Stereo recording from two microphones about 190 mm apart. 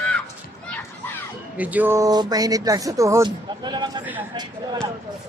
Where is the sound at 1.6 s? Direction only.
10° right (ahead or behind).